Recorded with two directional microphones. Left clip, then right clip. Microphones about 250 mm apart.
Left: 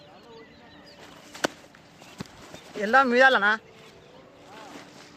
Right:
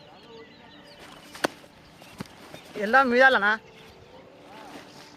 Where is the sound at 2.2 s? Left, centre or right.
Centre.